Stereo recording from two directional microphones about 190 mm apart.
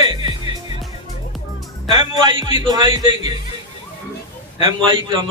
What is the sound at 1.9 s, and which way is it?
A man's voice, 25° right (ahead or behind).